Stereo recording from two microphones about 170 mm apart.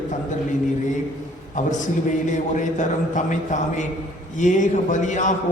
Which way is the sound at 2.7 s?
45° left (ahead or behind).